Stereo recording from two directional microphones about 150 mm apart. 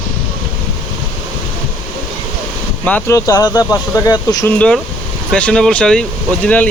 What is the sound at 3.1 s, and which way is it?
Speech, 25° left (ahead or behind).